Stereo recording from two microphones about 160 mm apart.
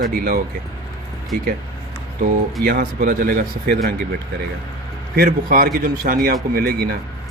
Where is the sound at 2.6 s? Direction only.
70° right (ahead or behind).